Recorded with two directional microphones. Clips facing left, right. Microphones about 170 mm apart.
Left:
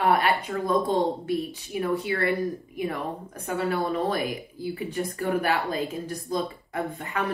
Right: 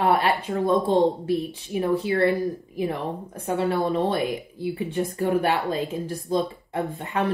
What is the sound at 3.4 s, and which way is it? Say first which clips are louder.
Speech: right 3 dB; 30° right (ahead or behind).